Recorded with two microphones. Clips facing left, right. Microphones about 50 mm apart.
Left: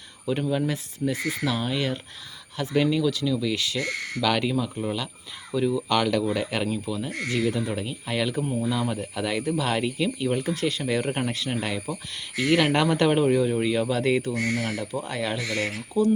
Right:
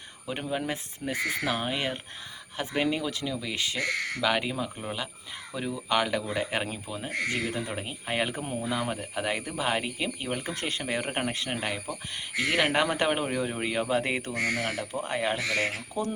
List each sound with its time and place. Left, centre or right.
0.3 s speech: right
10.2 s speech: right
11.9 s speech: centre